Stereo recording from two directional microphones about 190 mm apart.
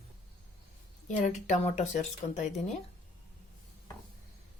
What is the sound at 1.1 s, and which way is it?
Speech, 35° left (ahead or behind).